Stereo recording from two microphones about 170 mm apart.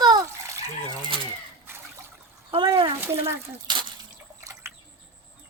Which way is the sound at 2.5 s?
30° right (ahead or behind).